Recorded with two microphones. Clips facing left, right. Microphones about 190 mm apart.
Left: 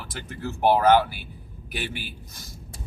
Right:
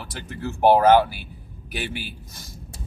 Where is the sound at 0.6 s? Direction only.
45° right (ahead or behind).